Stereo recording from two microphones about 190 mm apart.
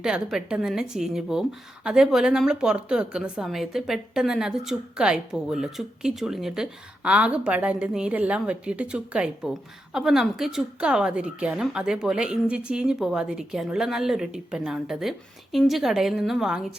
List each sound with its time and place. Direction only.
0.0 s a woman's voice: centre (ahead or behind)